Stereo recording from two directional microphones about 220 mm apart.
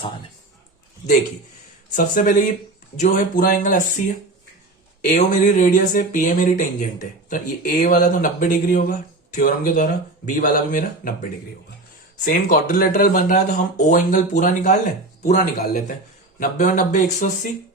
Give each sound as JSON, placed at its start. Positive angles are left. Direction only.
{"t": 1.9, "sound": "speech", "side_deg": 35}
{"t": 5.0, "sound": "speech", "side_deg": 35}
{"t": 12.2, "sound": "speech", "side_deg": 40}